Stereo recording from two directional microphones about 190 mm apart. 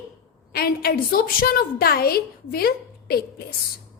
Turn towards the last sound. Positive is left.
turn(degrees=55)  # may be behind; listen again after turning